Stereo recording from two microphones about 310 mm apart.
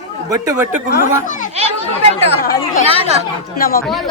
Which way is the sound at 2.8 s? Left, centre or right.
Centre.